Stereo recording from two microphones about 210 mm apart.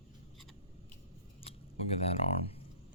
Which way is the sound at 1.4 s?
30° left (ahead or behind).